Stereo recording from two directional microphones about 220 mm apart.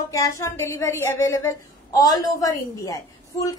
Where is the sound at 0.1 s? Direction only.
15° left (ahead or behind).